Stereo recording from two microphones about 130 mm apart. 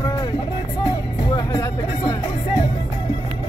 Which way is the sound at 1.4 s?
30° left (ahead or behind).